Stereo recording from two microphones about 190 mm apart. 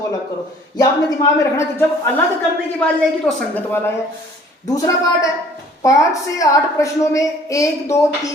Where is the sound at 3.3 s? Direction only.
10° left (ahead or behind).